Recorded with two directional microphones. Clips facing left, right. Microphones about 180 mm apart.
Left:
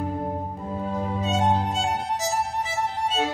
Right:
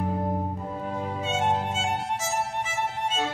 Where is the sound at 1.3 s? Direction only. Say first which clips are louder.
Left 3 dB; 35° left (ahead or behind).